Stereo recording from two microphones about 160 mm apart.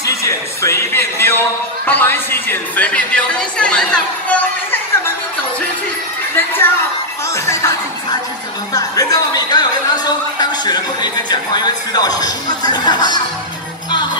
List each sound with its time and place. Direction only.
0.0 s speech: 20° left (ahead or behind)
6.3 s a man's voice: 15° left (ahead or behind)